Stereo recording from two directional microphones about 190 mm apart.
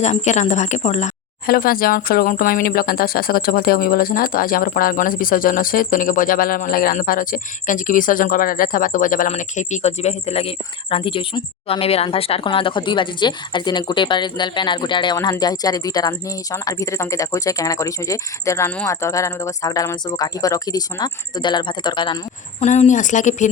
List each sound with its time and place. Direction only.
0.0 s speech: 35° left (ahead or behind)
1.5 s speech: 50° left (ahead or behind); by 22.2 s 25° left (ahead or behind)
22.6 s speech: 40° left (ahead or behind)